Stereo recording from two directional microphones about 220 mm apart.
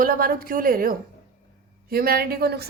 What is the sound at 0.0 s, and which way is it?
A woman's voice, 40° right (ahead or behind).